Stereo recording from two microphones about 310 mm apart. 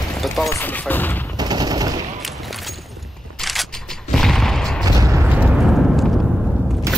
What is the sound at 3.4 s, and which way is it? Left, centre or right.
Fusillade, centre.